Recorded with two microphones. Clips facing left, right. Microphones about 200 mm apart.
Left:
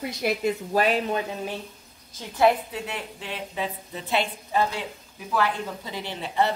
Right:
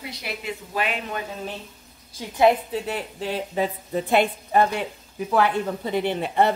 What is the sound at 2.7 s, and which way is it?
A woman's voice, 40° right (ahead or behind).